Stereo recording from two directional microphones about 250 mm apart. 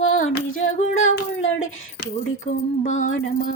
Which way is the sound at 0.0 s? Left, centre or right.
Left.